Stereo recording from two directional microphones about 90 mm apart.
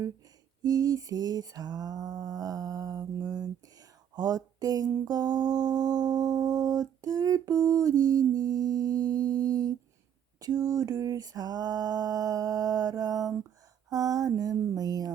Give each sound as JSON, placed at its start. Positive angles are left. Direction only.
{"t": 0.6, "sound": "lullaby", "side_deg": -45}